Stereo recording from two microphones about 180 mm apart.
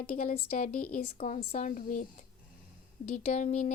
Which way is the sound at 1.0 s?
35° left (ahead or behind).